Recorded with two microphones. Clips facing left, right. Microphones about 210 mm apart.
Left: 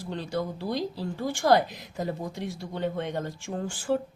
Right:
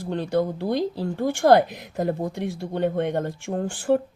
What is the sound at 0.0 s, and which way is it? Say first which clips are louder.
Speech: right 7 dB; 55° right (ahead or behind).